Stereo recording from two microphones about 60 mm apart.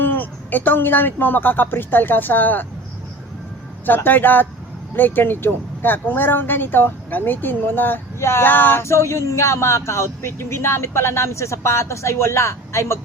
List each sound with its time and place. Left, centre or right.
0.0 s speech: left
3.8 s speech: left
8.8 s speech: left